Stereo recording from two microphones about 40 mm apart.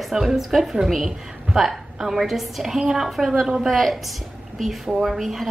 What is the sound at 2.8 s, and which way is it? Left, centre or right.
Speech, centre.